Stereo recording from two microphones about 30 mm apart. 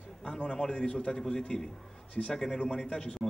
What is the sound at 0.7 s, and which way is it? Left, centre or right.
Speech, left.